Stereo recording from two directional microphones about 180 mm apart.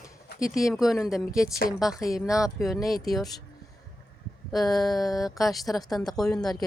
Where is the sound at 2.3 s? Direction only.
20° left (ahead or behind).